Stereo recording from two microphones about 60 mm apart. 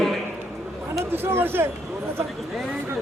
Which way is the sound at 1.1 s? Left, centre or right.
Right.